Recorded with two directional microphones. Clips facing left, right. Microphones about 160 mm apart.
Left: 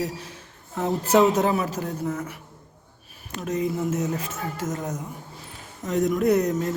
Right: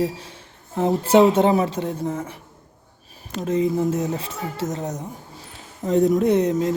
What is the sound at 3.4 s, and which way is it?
A man's voice, 30° right (ahead or behind).